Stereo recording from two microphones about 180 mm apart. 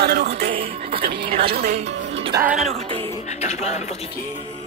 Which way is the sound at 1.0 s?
50° right (ahead or behind).